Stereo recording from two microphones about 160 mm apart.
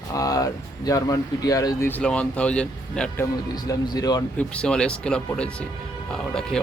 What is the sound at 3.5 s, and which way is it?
Speech, 25° left (ahead or behind).